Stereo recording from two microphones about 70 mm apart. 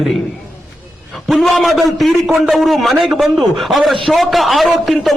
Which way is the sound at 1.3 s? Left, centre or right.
Centre.